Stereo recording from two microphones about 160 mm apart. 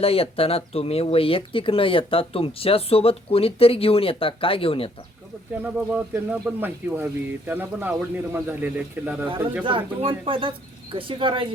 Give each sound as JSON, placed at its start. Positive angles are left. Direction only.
{"t": 0.0, "sound": "speech", "side_deg": 35}
{"t": 5.9, "sound": "speech", "side_deg": -10}
{"t": 9.6, "sound": "speech", "side_deg": -35}